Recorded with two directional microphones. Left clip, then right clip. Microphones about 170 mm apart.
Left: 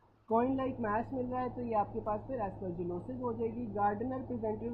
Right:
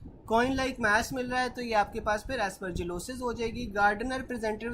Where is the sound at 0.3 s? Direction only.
25° right (ahead or behind).